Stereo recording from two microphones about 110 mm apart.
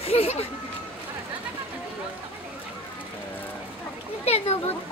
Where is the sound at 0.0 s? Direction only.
65° left (ahead or behind).